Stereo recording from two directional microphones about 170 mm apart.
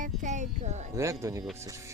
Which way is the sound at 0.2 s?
45° right (ahead or behind).